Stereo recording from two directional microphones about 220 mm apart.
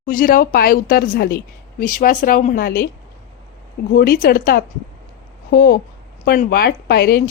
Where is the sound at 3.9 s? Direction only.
40° left (ahead or behind).